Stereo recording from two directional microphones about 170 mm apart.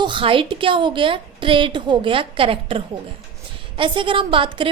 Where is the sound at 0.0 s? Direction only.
30° right (ahead or behind).